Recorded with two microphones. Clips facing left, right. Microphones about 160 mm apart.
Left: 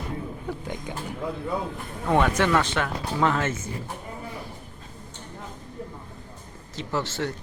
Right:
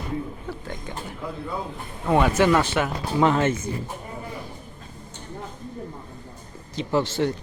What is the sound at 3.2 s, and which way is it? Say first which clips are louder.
Speech: right 5 dB; 20° right (ahead or behind).